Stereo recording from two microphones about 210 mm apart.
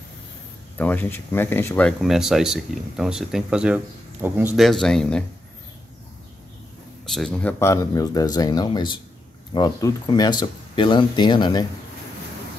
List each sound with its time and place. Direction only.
0.7 s speech: 10° left (ahead or behind)
7.1 s speech: 5° left (ahead or behind); by 11.6 s 20° left (ahead or behind)